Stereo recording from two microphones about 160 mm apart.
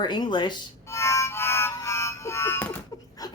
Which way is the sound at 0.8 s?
20° left (ahead or behind).